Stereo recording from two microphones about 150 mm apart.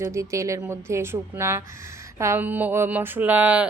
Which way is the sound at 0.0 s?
20° right (ahead or behind).